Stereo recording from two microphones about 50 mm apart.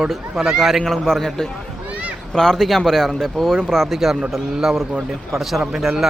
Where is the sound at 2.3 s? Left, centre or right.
Centre.